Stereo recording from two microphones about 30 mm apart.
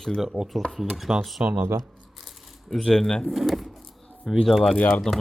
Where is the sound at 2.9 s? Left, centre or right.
Left.